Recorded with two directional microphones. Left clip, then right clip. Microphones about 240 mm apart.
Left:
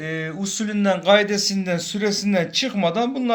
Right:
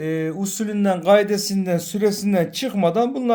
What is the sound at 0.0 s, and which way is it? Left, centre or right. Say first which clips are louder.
A man's voice: right 3 dB; right.